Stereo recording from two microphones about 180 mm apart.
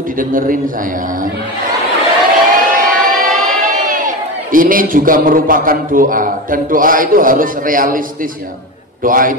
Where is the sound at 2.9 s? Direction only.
45° right (ahead or behind).